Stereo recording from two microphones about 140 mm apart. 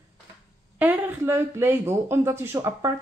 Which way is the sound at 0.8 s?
15° right (ahead or behind).